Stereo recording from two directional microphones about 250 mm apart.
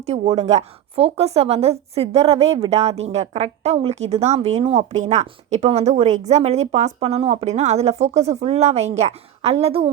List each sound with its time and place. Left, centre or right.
0.0 s a woman's voice: right